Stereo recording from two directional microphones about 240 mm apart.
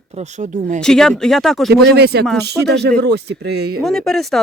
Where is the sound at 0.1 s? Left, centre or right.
Right.